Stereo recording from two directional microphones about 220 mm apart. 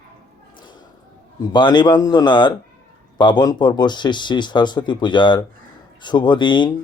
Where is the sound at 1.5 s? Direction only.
20° left (ahead or behind).